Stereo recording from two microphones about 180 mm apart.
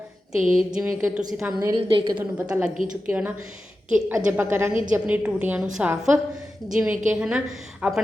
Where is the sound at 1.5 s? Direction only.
25° right (ahead or behind).